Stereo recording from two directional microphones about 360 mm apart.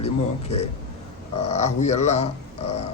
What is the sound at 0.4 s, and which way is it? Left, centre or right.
Speech, centre.